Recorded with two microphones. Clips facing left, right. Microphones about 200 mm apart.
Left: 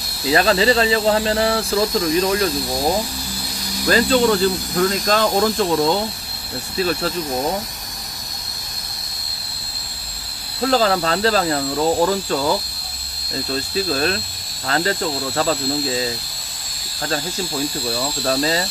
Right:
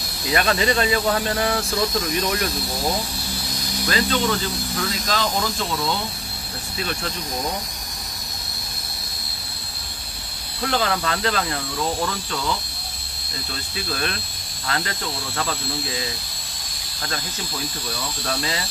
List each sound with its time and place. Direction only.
0.3 s speech: 30° left (ahead or behind); by 5.9 s 50° left (ahead or behind)
6.8 s speech: 35° left (ahead or behind)
10.6 s speech: 35° left (ahead or behind)
17.8 s speech: 35° left (ahead or behind)